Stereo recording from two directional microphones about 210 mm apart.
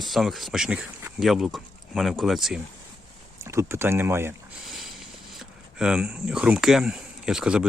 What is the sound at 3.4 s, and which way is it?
Speech, 10° right (ahead or behind).